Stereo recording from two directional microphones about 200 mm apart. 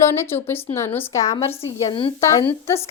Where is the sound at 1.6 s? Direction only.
25° left (ahead or behind).